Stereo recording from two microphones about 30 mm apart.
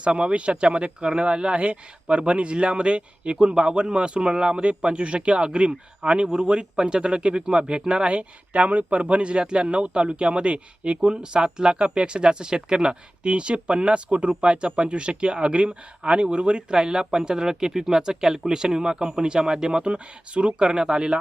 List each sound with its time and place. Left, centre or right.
0.3 s speech: right
3.3 s speech: right
16.7 s speech: right
19.9 s speech: right